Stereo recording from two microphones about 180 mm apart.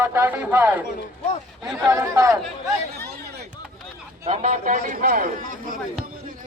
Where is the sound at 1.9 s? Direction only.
15° right (ahead or behind).